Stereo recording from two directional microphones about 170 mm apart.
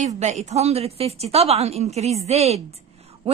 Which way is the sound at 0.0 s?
40° right (ahead or behind).